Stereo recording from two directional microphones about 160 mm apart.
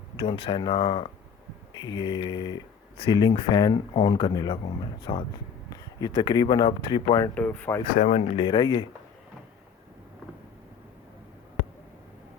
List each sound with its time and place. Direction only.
0.2 s speech: 35° left (ahead or behind)
7.3 s speech: 10° left (ahead or behind)
7.9 s speech: 45° left (ahead or behind)